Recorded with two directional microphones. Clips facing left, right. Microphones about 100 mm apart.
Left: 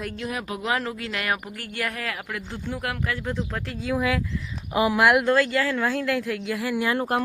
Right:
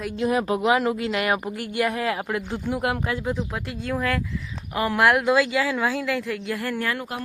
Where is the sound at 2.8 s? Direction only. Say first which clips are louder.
Right 4 dB; 25° right (ahead or behind).